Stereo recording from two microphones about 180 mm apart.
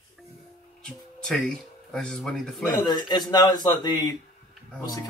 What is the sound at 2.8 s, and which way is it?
A man's voice, 25° left (ahead or behind).